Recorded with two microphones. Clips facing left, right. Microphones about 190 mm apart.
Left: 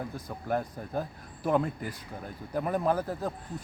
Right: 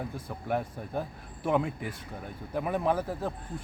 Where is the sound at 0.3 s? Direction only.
Centre (ahead or behind).